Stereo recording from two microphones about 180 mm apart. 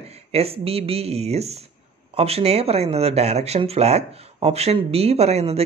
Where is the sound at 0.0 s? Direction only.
35° right (ahead or behind).